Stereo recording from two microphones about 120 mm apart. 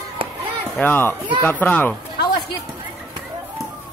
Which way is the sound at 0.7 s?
15° left (ahead or behind).